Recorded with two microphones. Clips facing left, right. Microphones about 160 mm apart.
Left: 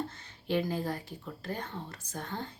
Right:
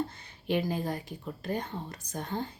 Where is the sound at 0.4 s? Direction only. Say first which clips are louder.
Right 1 dB; 15° right (ahead or behind).